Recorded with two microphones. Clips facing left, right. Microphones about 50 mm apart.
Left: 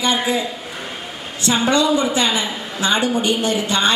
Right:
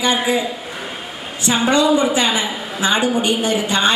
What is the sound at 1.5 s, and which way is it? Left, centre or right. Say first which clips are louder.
A woman's voice: right 1 dB; centre.